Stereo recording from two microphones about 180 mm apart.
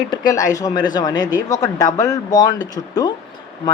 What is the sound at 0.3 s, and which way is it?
Speech, 20° left (ahead or behind).